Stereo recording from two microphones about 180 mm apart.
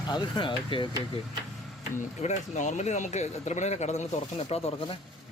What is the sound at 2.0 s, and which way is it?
Speech, 40° left (ahead or behind).